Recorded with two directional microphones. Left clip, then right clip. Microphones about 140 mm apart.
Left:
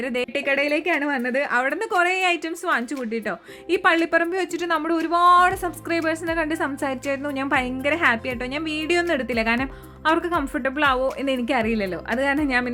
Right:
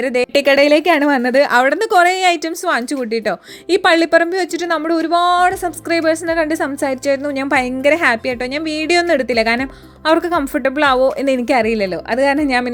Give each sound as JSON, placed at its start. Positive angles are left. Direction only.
{"t": 0.0, "sound": "a woman's voice", "side_deg": -25}
{"t": 0.3, "sound": "a woman's voice", "side_deg": -55}